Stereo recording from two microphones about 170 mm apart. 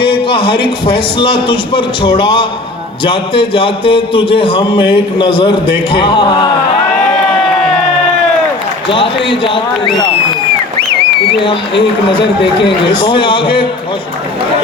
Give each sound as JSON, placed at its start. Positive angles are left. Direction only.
{"t": 0.0, "sound": "a man's voice", "side_deg": 30}
{"t": 8.9, "sound": "a man's voice", "side_deg": 30}
{"t": 12.6, "sound": "a man's voice", "side_deg": 30}